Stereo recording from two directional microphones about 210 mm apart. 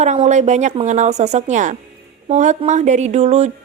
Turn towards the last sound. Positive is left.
turn(degrees=-30)  # may be behind; listen again after turning